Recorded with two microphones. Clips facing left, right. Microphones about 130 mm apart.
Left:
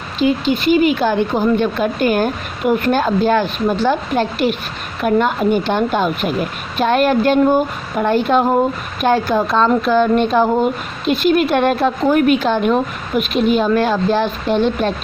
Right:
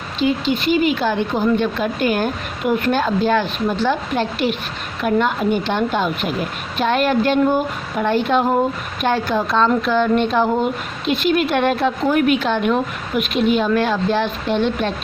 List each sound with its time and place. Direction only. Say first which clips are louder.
0.2 s a woman's voice: left 3 dB; 45° left (ahead or behind)